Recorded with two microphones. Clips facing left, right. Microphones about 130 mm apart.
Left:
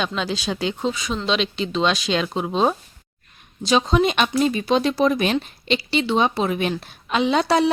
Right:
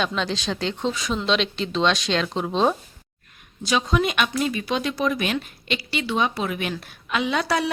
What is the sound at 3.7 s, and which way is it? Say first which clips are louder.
Speech: left 4 dB; 25° left (ahead or behind).